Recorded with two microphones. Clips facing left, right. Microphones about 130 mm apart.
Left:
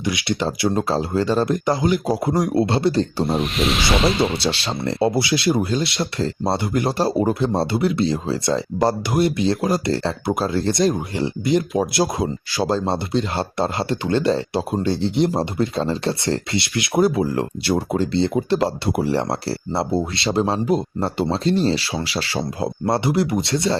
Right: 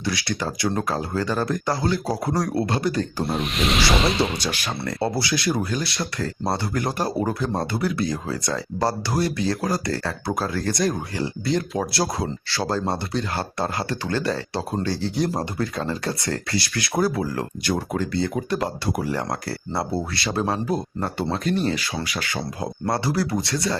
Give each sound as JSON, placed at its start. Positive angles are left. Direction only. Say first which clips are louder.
{"t": 0.0, "sound": "speech", "louder": "left 4 dB", "side_deg": 20}
{"t": 3.2, "sound": "speech", "louder": "left 3 dB", "side_deg": 0}
{"t": 4.4, "sound": "speech", "louder": "left 5 dB", "side_deg": 25}